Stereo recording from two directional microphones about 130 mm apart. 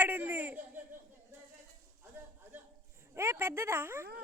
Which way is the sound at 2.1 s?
15° right (ahead or behind).